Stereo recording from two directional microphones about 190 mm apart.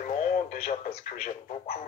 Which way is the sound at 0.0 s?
40° left (ahead or behind).